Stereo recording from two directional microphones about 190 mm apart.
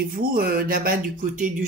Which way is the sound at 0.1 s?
50° right (ahead or behind).